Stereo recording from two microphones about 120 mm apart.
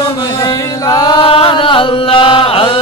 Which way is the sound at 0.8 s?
35° left (ahead or behind).